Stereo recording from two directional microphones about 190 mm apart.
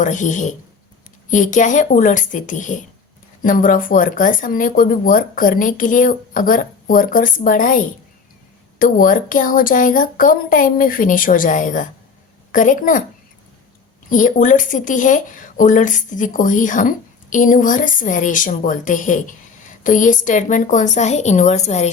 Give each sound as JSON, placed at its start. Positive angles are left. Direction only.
{"t": 0.0, "sound": "a woman's voice", "side_deg": 40}
{"t": 14.1, "sound": "speech", "side_deg": 45}